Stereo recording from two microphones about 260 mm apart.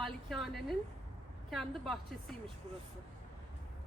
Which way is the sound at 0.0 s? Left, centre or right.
Centre.